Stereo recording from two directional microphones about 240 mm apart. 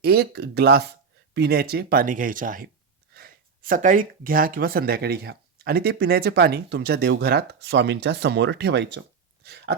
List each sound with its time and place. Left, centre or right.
0.0 s speech: right
9.4 s hiccup: right